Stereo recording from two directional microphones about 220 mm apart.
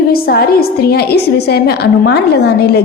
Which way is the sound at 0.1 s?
45° left (ahead or behind).